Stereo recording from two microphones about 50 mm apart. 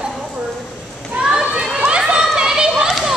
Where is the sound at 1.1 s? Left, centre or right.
Right.